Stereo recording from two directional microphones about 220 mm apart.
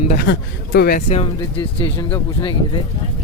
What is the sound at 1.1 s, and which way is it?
Speech, 25° left (ahead or behind).